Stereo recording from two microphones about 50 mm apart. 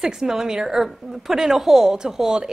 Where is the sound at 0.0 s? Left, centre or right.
Centre.